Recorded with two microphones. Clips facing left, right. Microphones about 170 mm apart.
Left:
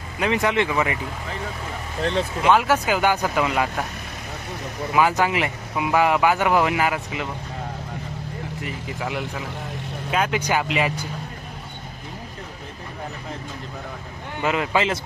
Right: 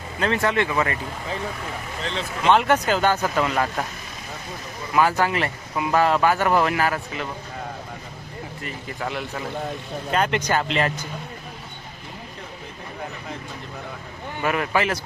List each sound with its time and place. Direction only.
0.2 s speech: 15° left (ahead or behind)
2.4 s speech: 5° left (ahead or behind)
4.9 s speech: 15° left (ahead or behind)
9.0 s speech: 10° left (ahead or behind)
14.4 s speech: 20° left (ahead or behind)